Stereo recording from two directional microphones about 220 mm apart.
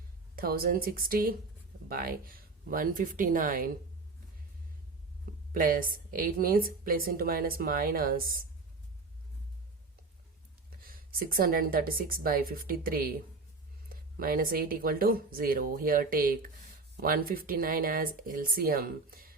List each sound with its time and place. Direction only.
0.3 s a woman's voice: 45° right (ahead or behind)
5.5 s a woman's voice: 40° right (ahead or behind)
10.8 s a woman's voice: 40° right (ahead or behind)